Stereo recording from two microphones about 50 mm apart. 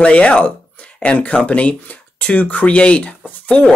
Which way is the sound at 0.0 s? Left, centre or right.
Left.